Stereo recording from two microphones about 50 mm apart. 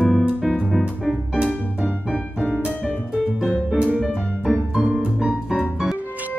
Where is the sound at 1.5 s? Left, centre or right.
Left.